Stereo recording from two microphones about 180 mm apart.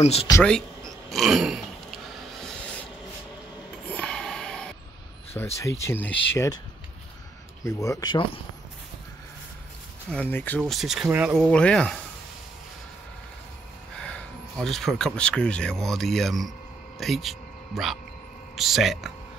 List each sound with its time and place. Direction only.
0.0 s speech: 35° left (ahead or behind)
0.4 s a sound: 5° left (ahead or behind)
3.9 s a sound: 5° left (ahead or behind)
5.3 s speech: 15° left (ahead or behind)
7.6 s speech: 15° left (ahead or behind)
10.1 s speech: 10° left (ahead or behind)
10.6 s speech: centre (ahead or behind)
11.4 s speech: 5° left (ahead or behind)
13.9 s speech: 5° left (ahead or behind)